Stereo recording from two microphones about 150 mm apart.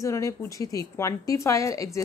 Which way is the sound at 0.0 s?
20° left (ahead or behind).